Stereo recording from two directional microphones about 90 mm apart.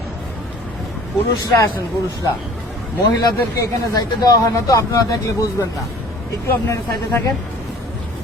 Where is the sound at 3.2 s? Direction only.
35° left (ahead or behind).